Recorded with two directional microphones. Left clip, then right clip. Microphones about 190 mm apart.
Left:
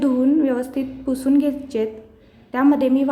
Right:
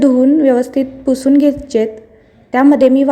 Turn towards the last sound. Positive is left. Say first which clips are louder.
# right 8 dB
turn(degrees=-25)  # may be behind; listen again after turning